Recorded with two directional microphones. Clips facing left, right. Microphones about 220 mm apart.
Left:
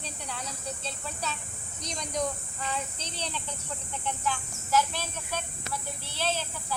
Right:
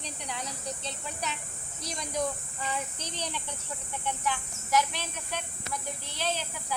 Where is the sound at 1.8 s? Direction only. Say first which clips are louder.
Even; 5° right (ahead or behind).